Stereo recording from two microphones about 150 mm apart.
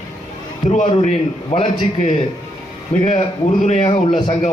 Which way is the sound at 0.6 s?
40° left (ahead or behind).